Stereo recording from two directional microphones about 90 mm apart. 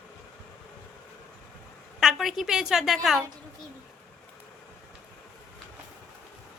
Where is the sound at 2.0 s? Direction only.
5° right (ahead or behind).